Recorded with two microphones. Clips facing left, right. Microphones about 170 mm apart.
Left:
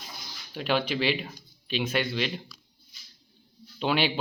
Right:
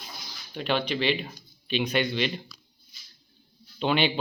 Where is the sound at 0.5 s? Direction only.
5° left (ahead or behind).